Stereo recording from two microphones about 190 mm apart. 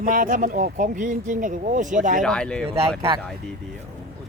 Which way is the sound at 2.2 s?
5° left (ahead or behind).